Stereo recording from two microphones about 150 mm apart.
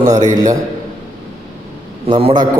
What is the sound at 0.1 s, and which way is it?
Speech, 25° right (ahead or behind).